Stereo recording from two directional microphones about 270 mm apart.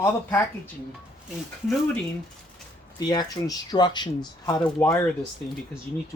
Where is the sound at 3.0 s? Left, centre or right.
Centre.